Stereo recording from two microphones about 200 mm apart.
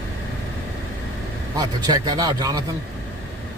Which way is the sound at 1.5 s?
20° right (ahead or behind).